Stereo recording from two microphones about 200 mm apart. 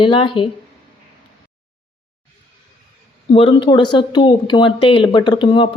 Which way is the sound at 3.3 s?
25° left (ahead or behind).